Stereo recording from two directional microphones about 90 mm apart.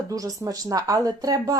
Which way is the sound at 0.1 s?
40° right (ahead or behind).